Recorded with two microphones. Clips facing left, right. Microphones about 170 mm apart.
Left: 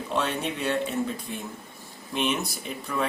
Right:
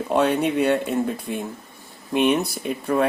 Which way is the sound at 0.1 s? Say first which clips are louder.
Right 9 dB; 55° right (ahead or behind).